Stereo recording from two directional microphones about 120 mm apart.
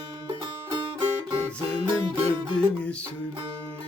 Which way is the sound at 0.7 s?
40° right (ahead or behind).